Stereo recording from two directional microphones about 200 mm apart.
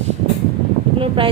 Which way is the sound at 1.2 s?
25° right (ahead or behind).